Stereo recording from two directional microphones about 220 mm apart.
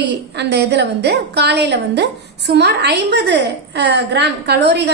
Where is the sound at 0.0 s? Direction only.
50° right (ahead or behind).